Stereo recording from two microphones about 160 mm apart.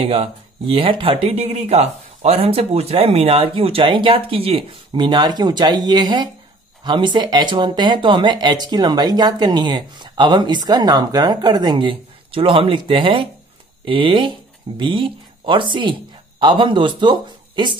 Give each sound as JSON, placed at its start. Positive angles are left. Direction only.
{"t": 0.0, "sound": "speech", "side_deg": -35}